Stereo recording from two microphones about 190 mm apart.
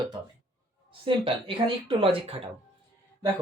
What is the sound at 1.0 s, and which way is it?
Speech, 30° right (ahead or behind).